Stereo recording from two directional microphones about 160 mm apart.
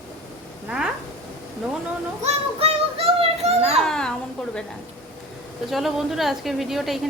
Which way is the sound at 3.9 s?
5° left (ahead or behind).